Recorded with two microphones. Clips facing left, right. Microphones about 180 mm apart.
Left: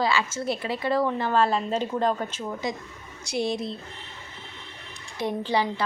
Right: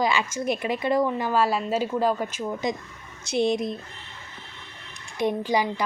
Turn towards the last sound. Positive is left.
turn(degrees=-15)  # may be behind; listen again after turning